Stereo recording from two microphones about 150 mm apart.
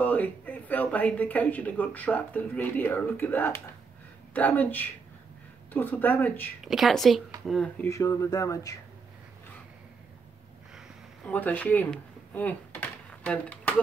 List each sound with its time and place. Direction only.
0.0 s speech: 10° left (ahead or behind)
6.6 s a woman's voice: centre (ahead or behind)
7.8 s speech: 20° left (ahead or behind)
11.2 s a sound: 10° left (ahead or behind)